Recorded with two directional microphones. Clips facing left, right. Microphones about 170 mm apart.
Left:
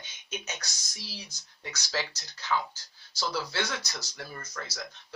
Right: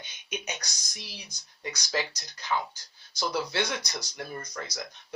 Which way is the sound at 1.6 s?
15° right (ahead or behind).